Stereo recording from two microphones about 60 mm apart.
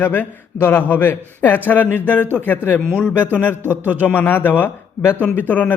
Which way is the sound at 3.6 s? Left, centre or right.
Right.